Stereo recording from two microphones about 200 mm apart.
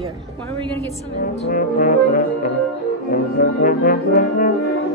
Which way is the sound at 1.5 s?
45° left (ahead or behind).